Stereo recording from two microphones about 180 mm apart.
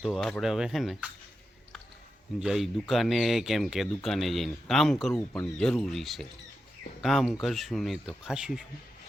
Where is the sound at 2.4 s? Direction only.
Centre (ahead or behind).